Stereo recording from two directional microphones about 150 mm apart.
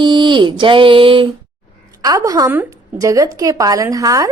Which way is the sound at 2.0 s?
25° right (ahead or behind).